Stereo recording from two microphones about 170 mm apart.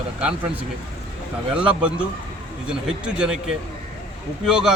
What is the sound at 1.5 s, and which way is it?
Speech, 5° right (ahead or behind).